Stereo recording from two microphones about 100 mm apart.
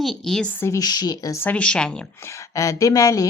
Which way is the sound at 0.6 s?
35° left (ahead or behind).